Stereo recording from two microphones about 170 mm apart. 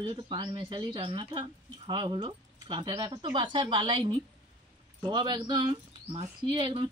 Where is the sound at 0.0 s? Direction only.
30° right (ahead or behind).